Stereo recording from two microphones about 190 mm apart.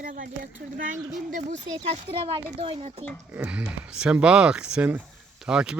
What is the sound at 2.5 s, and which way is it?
Speech, 30° right (ahead or behind).